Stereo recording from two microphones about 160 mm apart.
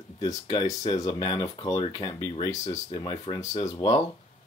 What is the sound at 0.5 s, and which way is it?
Speech, 25° left (ahead or behind).